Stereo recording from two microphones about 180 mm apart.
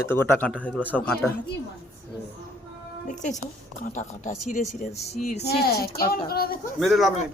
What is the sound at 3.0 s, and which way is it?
Speech, 45° left (ahead or behind).